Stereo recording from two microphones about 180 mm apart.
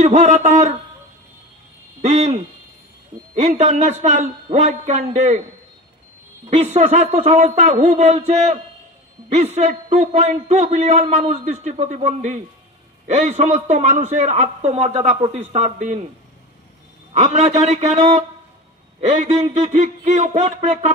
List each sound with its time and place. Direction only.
0.0 s speech: 40° right (ahead or behind)
2.0 s speech: 40° right (ahead or behind)
6.5 s speech: 40° right (ahead or behind)
17.1 s a man's voice: 40° right (ahead or behind)